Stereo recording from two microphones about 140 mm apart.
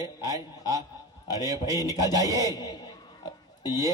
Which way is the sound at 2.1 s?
25° right (ahead or behind).